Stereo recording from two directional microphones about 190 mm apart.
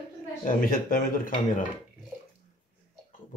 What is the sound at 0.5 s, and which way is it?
Speech, 50° left (ahead or behind).